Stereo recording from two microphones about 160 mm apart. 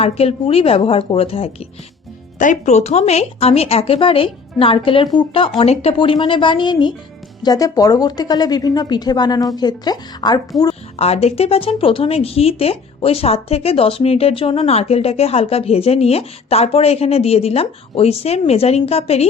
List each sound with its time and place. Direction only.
0.0 s a woman's voice: 40° left (ahead or behind)
10.9 s speech: 40° left (ahead or behind)